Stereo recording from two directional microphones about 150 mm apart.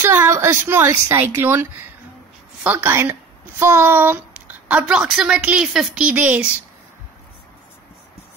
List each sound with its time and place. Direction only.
0.0 s a woman's voice: 15° right (ahead or behind)